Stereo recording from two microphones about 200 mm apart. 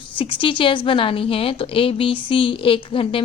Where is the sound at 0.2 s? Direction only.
25° left (ahead or behind).